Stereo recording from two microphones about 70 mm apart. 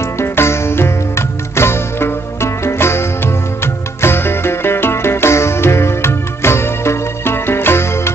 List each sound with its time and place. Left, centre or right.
0.2 s music: left